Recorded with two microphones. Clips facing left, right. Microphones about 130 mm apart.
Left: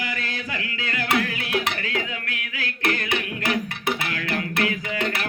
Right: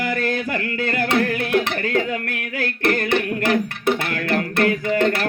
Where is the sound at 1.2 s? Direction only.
50° right (ahead or behind).